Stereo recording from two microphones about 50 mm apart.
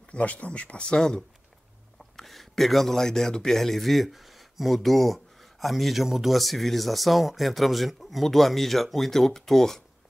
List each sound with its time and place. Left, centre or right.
0.1 s speech: left
2.1 s speech: centre